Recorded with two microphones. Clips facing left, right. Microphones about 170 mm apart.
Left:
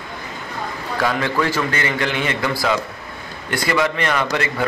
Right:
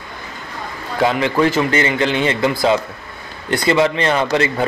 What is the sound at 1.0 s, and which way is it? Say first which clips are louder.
A man's voice: right 5 dB; 20° right (ahead or behind).